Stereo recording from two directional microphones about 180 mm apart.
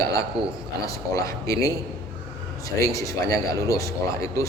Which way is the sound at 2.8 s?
20° left (ahead or behind).